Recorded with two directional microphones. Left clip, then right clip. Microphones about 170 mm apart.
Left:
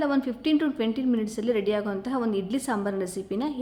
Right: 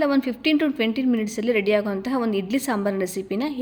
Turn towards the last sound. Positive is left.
turn(degrees=-20)  # may be behind; listen again after turning